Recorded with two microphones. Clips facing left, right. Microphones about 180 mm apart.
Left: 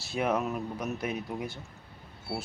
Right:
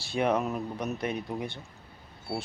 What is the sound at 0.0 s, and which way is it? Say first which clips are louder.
Speech: right 2 dB; 5° left (ahead or behind).